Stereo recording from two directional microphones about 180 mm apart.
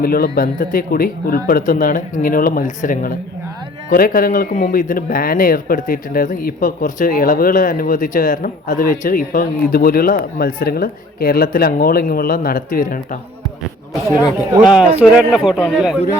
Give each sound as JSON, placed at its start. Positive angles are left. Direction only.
{"t": 0.0, "sound": "a man's voice", "side_deg": 55}
{"t": 14.6, "sound": "a man's voice", "side_deg": -5}